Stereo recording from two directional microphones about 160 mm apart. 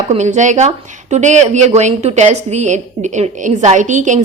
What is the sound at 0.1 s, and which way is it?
A woman's voice, 45° right (ahead or behind).